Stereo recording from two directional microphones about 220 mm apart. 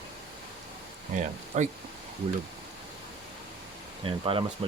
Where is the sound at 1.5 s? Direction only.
30° right (ahead or behind).